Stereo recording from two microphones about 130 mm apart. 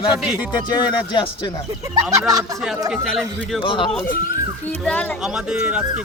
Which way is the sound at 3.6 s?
40° left (ahead or behind).